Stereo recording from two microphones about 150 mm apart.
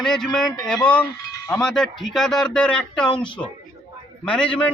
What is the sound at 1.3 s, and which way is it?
Cowbell, 20° left (ahead or behind).